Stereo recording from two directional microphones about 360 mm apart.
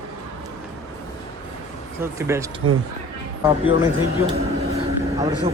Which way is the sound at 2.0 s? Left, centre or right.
Centre.